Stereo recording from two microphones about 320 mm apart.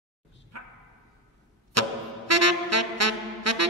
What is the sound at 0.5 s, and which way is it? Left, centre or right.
Dog, right.